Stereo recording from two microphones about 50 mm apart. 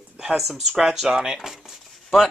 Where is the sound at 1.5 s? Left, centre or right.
Centre.